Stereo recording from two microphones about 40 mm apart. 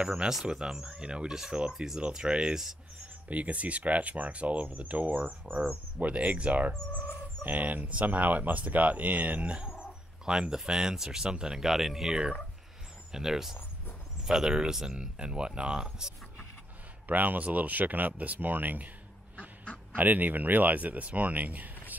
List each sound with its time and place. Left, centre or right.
0.1 s speech: centre
3.3 s speech: right; by 16.1 s centre
17.1 s speech: right
20.0 s speech: right